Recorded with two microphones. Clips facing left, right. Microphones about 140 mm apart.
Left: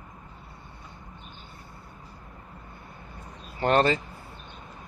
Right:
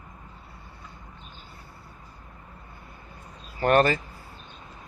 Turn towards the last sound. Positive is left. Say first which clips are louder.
# right 1 dB
turn(degrees=20)  # may be behind; listen again after turning